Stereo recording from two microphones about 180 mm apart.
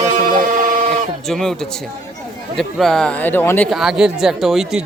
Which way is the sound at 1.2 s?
Centre (ahead or behind).